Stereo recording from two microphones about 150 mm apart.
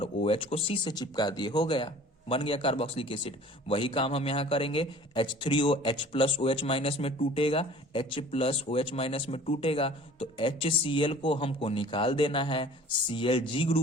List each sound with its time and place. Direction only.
0.0 s speech: 35° left (ahead or behind)